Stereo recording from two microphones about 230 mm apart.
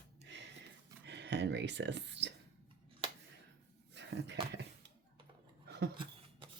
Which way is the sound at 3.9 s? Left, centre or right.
Right.